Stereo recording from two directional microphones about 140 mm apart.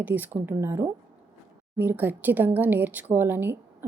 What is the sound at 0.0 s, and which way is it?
Speech, 10° right (ahead or behind).